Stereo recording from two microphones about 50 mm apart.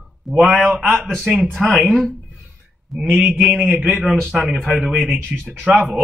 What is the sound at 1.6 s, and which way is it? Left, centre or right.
Speech, centre.